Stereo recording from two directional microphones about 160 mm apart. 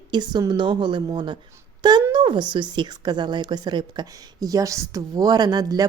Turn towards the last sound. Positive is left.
turn(degrees=-25)  # may be behind; listen again after turning